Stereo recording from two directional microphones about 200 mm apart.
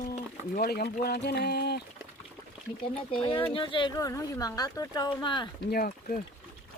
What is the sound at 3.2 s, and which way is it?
Speech, 30° left (ahead or behind).